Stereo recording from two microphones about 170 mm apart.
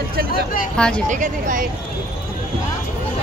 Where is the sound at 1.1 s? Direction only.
50° right (ahead or behind).